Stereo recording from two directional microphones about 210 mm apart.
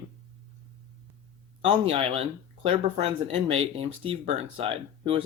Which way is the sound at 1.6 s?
25° right (ahead or behind).